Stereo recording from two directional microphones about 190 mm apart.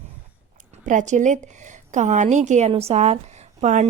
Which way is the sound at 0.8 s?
40° right (ahead or behind).